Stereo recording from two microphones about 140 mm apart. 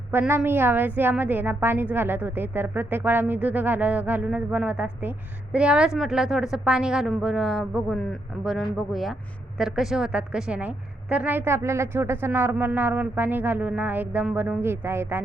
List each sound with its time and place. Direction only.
0.1 s a woman's voice: 15° right (ahead or behind)